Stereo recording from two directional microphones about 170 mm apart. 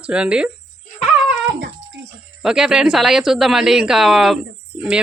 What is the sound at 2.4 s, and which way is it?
Speech, 5° right (ahead or behind).